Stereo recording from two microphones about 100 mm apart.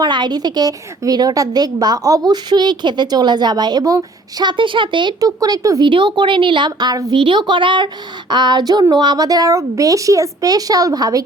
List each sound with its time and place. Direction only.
0.0 s a woman's voice: 45° right (ahead or behind)
5.2 s a woman's voice: 35° right (ahead or behind)
5.8 s a woman's voice: 55° right (ahead or behind)
7.2 s a woman's voice: 55° right (ahead or behind); by 11.2 s 40° right (ahead or behind)